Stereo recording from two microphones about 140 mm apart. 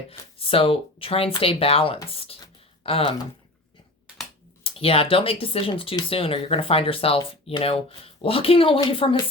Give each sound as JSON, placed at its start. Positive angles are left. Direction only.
{"t": 0.1, "sound": "speech", "side_deg": 40}
{"t": 4.6, "sound": "speech", "side_deg": 40}